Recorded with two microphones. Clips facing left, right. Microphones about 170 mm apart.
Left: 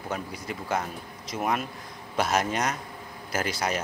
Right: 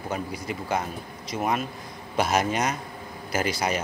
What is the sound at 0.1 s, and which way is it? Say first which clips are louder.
Speech: right 2 dB; 5° right (ahead or behind).